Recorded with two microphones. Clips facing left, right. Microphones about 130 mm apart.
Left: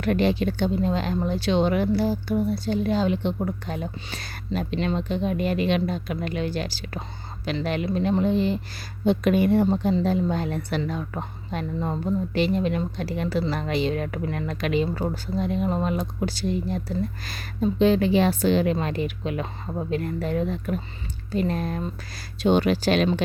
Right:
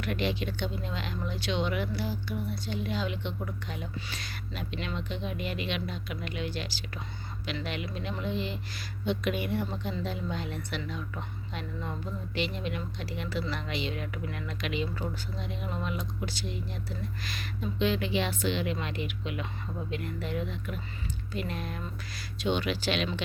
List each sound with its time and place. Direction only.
0.0 s speech: 40° left (ahead or behind)